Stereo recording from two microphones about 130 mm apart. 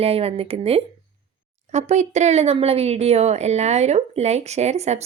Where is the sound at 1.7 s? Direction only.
65° right (ahead or behind).